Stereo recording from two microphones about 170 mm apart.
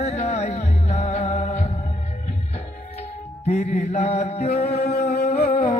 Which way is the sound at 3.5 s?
40° left (ahead or behind).